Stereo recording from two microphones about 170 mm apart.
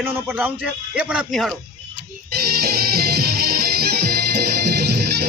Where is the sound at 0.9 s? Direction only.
Centre (ahead or behind).